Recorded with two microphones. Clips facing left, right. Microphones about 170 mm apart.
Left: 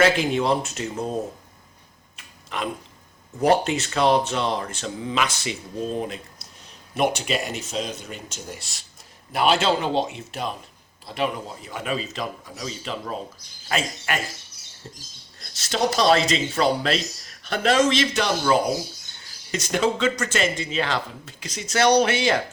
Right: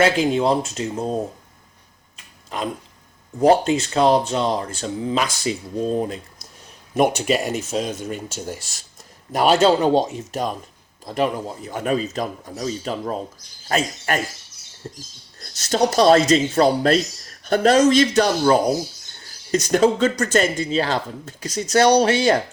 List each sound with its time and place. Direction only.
0.2 s speech: 35° right (ahead or behind)
2.1 s a sound: 35° right (ahead or behind)
3.4 s speech: 35° right (ahead or behind)
15.4 s speech: 45° right (ahead or behind)